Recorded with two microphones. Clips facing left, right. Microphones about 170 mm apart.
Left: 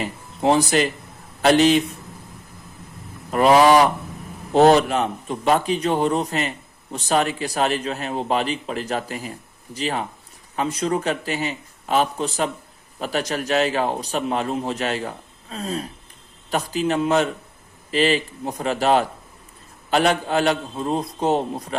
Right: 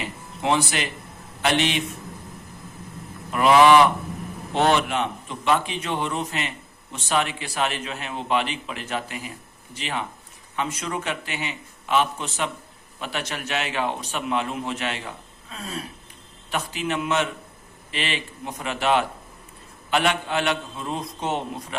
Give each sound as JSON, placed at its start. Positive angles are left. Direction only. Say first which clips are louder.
{"t": 0.0, "sound": "a sound", "louder": "left 6 dB", "side_deg": 40}
{"t": 1.4, "sound": "a man's voice", "louder": "left 8 dB", "side_deg": 40}
{"t": 3.3, "sound": "a man's voice", "louder": "left 1 dB", "side_deg": 40}